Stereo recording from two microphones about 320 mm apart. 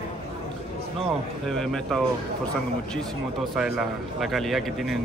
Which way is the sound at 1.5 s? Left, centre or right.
Centre.